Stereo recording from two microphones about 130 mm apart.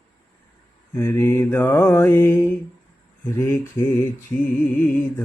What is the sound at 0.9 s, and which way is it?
Mantra, 20° left (ahead or behind).